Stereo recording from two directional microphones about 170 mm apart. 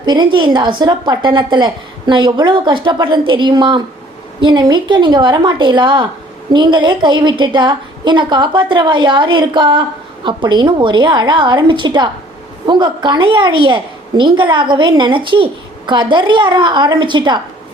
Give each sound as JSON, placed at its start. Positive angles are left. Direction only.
{"t": 0.0, "sound": "a woman's voice", "side_deg": -25}